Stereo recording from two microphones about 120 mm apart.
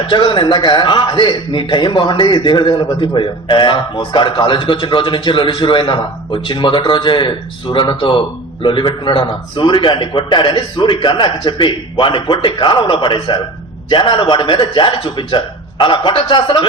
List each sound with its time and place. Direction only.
0.0 s a man's voice: 40° left (ahead or behind)